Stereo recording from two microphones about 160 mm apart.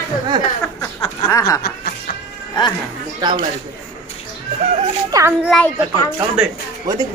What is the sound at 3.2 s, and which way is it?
Speech, 25° right (ahead or behind).